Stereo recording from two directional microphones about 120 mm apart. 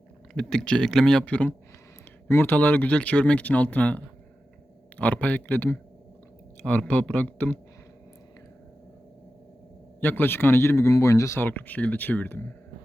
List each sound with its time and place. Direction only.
0.3 s speech: 5° left (ahead or behind)
10.0 s speech: 15° left (ahead or behind)